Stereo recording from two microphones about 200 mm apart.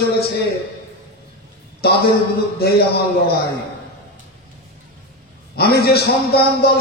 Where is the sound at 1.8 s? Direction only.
50° left (ahead or behind).